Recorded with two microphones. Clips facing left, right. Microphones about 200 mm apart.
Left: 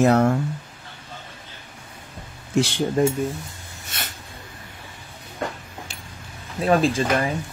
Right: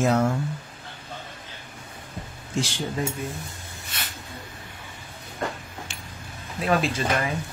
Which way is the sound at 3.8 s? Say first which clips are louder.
Left 3 dB; 45° left (ahead or behind).